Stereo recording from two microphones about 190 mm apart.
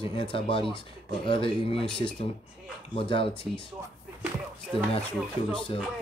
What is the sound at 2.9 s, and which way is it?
Speech, 30° left (ahead or behind).